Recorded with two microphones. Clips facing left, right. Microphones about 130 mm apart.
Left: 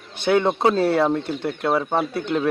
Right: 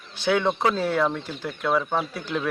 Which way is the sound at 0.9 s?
30° left (ahead or behind).